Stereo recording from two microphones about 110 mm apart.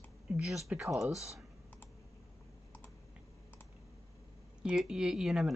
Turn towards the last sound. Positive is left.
turn(degrees=-5)  # may be behind; listen again after turning